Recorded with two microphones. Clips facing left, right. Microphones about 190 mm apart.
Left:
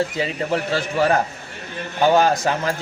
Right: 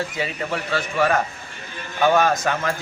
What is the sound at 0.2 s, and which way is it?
A man's voice, 35° left (ahead or behind).